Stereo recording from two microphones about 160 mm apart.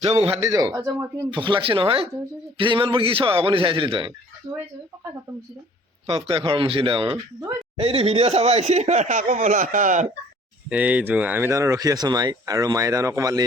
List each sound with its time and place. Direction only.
0.0 s a man's voice: 35° right (ahead or behind)
0.4 s speech: 20° right (ahead or behind)
1.3 s a man's voice: 30° right (ahead or behind)
6.1 s a man's voice: 35° right (ahead or behind); by 10.1 s 55° right (ahead or behind)
10.7 s speech: 10° right (ahead or behind)